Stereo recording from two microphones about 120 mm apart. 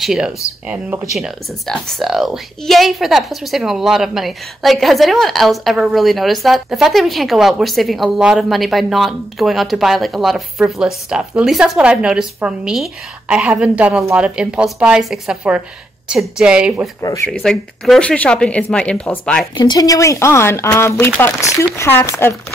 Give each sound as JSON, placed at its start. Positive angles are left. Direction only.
{"t": 0.0, "sound": "a woman's voice", "side_deg": -5}
{"t": 17.0, "sound": "speech", "side_deg": 30}
{"t": 17.3, "sound": "speech", "side_deg": 5}
{"t": 19.6, "sound": "speech", "side_deg": 30}